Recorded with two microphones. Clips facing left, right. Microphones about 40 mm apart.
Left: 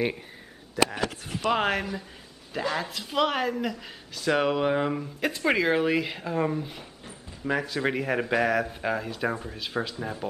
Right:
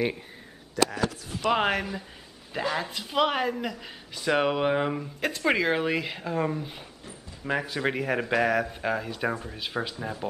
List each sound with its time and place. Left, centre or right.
0.9 s speech: left
1.5 s speech: centre